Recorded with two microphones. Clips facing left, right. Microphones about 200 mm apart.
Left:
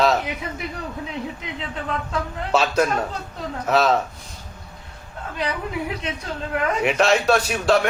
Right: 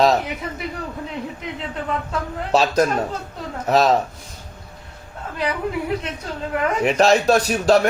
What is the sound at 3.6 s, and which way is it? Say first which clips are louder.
Speech: right 2 dB; 35° right (ahead or behind).